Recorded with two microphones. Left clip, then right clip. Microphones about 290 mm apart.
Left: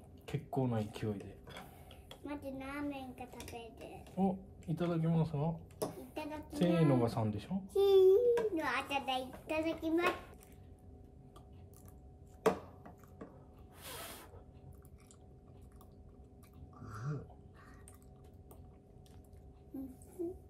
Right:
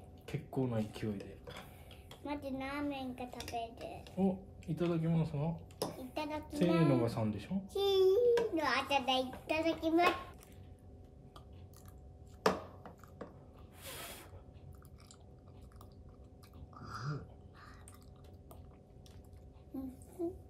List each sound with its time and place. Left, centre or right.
0.3 s speech: centre
1.9 s a child's voice: centre
4.2 s speech: centre
6.1 s a child's voice: centre
6.5 s speech: centre
7.7 s a child's voice: centre
12.4 s a sound: centre
16.8 s dog: centre